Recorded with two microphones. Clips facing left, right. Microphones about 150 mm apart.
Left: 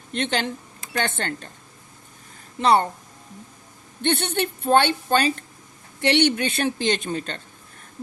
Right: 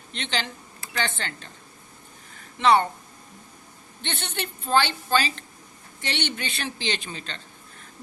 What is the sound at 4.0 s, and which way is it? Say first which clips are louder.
A woman's voice: left 10 dB; 55° left (ahead or behind).